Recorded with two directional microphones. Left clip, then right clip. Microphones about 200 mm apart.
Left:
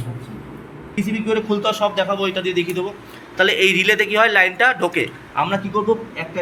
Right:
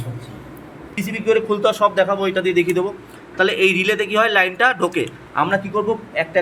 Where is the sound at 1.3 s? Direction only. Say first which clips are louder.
Right 4 dB; 40° right (ahead or behind).